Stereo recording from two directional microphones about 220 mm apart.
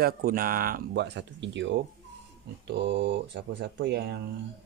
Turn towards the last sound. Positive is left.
turn(degrees=-50)  # may be behind; listen again after turning